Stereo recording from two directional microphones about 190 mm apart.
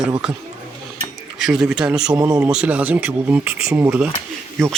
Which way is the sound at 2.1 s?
20° right (ahead or behind).